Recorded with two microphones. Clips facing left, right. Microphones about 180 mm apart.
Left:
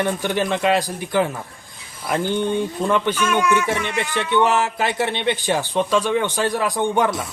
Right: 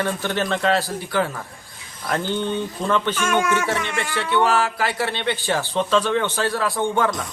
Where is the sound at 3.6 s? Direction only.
15° left (ahead or behind).